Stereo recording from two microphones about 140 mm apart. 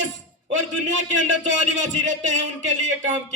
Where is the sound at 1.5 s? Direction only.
55° right (ahead or behind).